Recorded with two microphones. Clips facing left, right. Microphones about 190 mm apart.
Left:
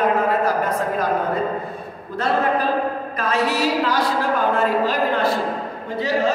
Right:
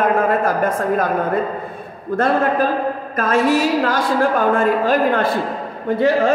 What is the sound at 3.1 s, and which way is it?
A woman's voice, 50° right (ahead or behind).